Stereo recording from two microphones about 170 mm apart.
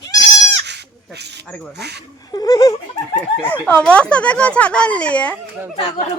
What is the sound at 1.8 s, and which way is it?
Speech, 75° right (ahead or behind).